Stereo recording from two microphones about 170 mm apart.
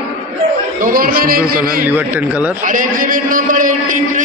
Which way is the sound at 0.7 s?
55° right (ahead or behind).